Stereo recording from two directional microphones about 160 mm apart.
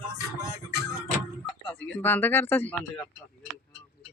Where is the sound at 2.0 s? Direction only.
10° left (ahead or behind).